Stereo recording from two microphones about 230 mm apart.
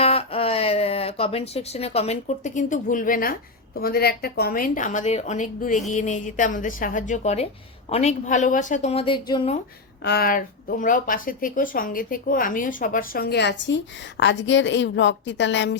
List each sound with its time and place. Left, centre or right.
0.0 s a woman's voice: left
10.0 s a woman's voice: left